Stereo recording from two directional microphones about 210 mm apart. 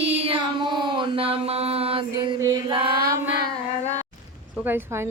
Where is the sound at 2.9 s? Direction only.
50° right (ahead or behind).